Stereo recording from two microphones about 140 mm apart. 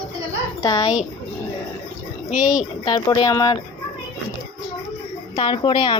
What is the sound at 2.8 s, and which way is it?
Speech, 30° left (ahead or behind).